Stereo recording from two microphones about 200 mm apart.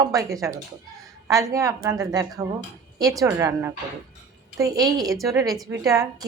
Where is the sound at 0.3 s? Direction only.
15° right (ahead or behind).